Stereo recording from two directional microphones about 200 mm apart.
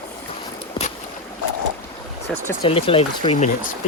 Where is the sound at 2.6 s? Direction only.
30° left (ahead or behind).